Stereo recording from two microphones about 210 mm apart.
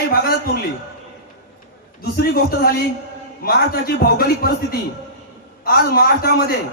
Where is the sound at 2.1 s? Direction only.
45° left (ahead or behind).